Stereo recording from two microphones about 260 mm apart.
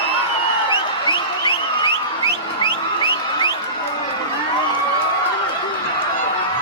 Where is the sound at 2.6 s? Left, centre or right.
Centre.